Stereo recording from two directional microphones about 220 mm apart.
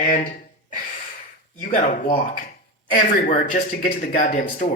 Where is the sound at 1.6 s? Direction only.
35° left (ahead or behind).